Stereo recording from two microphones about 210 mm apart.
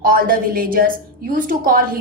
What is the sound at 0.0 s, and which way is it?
A woman's voice, 45° right (ahead or behind).